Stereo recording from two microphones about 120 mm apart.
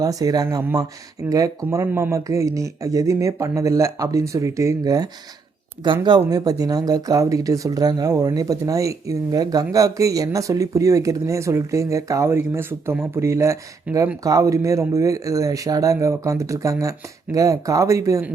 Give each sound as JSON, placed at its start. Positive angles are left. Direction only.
{"t": 0.0, "sound": "speech", "side_deg": -30}
{"t": 13.9, "sound": "speech", "side_deg": -10}
{"t": 14.3, "sound": "speech", "side_deg": -30}